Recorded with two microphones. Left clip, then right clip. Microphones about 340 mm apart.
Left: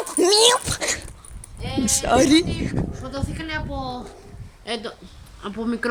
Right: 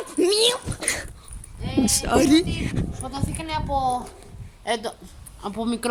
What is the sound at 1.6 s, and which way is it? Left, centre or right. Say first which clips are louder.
A man's voice: even; centre.